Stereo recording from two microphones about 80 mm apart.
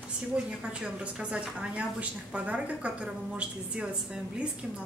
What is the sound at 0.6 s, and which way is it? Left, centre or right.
A woman's voice, centre.